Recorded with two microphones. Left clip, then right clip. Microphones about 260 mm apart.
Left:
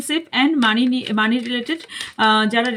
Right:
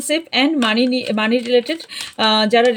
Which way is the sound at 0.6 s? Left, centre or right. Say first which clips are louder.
Right 1 dB; right.